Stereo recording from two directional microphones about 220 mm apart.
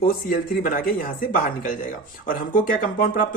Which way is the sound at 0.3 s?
40° left (ahead or behind).